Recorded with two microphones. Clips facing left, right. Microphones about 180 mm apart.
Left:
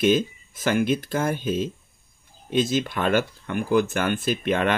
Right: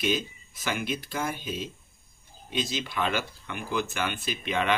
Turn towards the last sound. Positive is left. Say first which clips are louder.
# left 6 dB
turn(degrees=50)  # may be behind; listen again after turning